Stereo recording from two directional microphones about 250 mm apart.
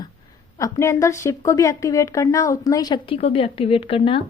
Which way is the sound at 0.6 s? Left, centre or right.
Centre.